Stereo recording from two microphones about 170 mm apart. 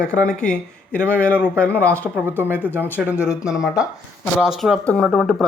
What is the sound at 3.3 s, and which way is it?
Speech, 5° right (ahead or behind).